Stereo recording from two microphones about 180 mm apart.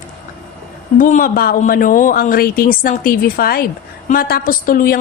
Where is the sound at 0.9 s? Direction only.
45° left (ahead or behind).